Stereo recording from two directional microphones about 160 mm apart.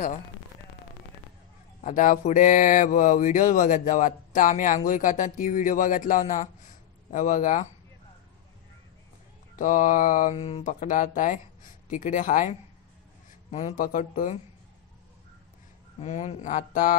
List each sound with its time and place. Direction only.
1.8 s mantra: 50° left (ahead or behind)
9.6 s mantra: 55° left (ahead or behind)
10.6 s mantra: 55° left (ahead or behind)
11.9 s speech: 55° left (ahead or behind)
13.5 s mantra: 45° left (ahead or behind)
16.0 s mantra: 45° left (ahead or behind)